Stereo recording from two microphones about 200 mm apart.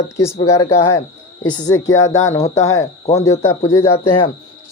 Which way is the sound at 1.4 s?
20° left (ahead or behind).